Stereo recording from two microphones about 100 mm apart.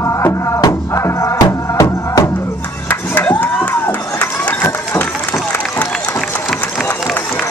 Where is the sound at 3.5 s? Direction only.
15° left (ahead or behind).